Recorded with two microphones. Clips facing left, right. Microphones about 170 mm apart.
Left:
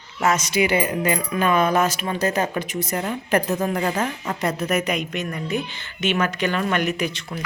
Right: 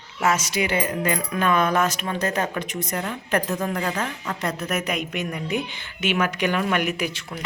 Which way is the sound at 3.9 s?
20° left (ahead or behind).